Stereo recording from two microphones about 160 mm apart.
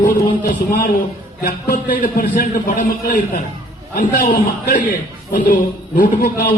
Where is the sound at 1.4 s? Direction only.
60° left (ahead or behind).